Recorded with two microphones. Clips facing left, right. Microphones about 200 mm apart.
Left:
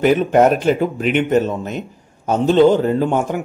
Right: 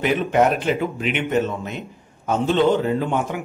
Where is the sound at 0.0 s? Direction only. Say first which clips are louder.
Left 5 dB; 45° left (ahead or behind).